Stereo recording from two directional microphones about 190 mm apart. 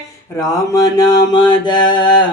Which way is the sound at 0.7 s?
20° left (ahead or behind).